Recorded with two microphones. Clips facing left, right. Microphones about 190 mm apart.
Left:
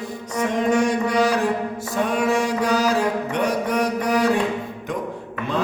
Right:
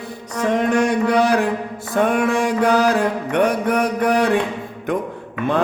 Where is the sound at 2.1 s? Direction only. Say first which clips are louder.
Even; 55° right (ahead or behind).